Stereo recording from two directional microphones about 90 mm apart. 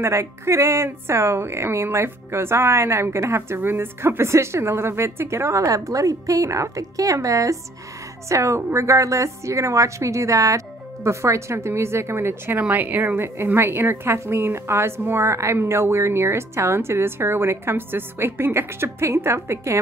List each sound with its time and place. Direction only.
0.0 s a woman's voice: 30° right (ahead or behind)